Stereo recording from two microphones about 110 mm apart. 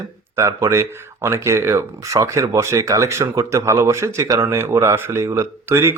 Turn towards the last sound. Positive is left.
turn(degrees=-25)  # may be behind; listen again after turning